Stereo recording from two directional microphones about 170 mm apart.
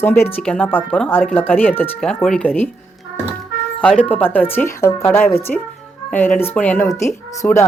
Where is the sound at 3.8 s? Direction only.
5° left (ahead or behind).